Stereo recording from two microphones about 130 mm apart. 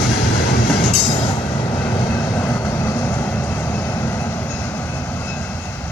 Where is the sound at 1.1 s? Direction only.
35° left (ahead or behind).